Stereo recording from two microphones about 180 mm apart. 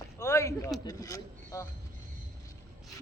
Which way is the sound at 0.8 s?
20° left (ahead or behind).